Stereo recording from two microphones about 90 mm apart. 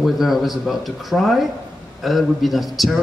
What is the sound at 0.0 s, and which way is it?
A man's voice, centre (ahead or behind).